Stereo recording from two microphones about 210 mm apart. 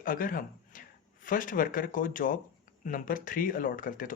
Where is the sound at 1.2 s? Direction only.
40° left (ahead or behind).